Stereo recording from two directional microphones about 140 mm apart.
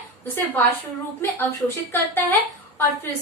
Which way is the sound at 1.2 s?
15° left (ahead or behind).